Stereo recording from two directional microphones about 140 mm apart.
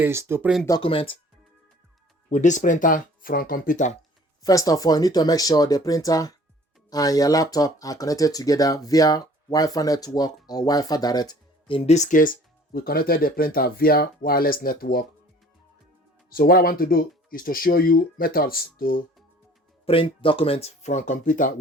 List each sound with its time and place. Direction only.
0.0 s speech: 20° right (ahead or behind)
0.8 s speech: 40° left (ahead or behind)
2.3 s speech: 60° left (ahead or behind)
4.4 s speech: 25° left (ahead or behind)
11.8 s speech: 55° left (ahead or behind); by 15.0 s 90° left
16.3 s speech: 90° left
19.8 s speech: 40° left (ahead or behind); by 21.5 s 70° left (ahead or behind)